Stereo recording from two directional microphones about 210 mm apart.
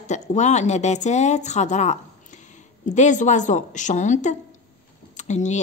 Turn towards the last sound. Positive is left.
turn(degrees=35)  # may be behind; listen again after turning